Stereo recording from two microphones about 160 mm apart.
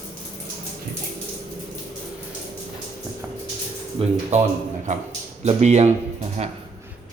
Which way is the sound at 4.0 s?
35° right (ahead or behind).